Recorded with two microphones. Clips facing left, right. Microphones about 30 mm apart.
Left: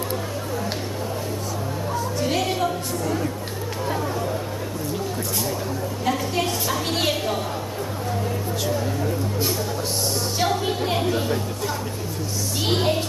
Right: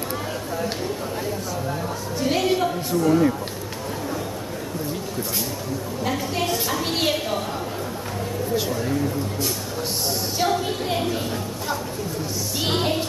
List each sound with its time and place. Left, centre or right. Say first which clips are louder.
2.1 s a woman's voice: right 4 dB; centre
6.0 s a woman's voice: left 1 dB; centre
8.5 s speech: right 1 dB; centre
10.4 s a woman's voice: even; centre